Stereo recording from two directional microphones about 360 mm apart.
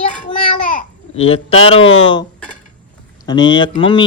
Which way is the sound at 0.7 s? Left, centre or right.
Centre.